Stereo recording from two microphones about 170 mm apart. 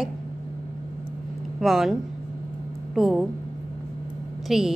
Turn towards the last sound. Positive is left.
turn(degrees=0)  # may be behind; listen again after turning